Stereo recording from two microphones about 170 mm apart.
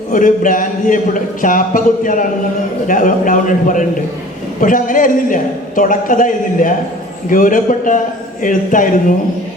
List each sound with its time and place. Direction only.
0.1 s a man's voice: 50° left (ahead or behind)